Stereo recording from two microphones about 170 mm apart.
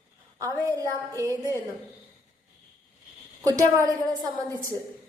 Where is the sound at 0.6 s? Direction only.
20° right (ahead or behind).